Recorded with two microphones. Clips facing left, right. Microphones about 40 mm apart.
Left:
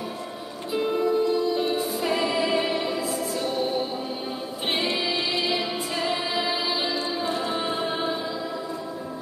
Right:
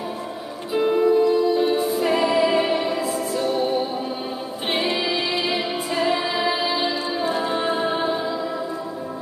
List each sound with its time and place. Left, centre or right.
0.8 s music: centre
1.6 s music: centre
4.6 s music: centre